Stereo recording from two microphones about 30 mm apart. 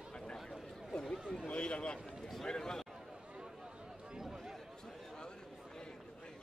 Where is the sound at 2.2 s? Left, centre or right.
Centre.